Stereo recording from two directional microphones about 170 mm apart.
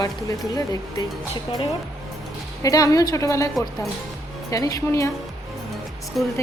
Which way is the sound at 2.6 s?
20° left (ahead or behind).